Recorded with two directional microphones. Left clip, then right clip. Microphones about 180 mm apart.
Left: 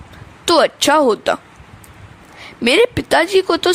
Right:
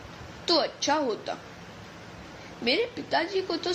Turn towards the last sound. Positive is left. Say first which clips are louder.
# left 14 dB
turn(degrees=60)  # may be behind; listen again after turning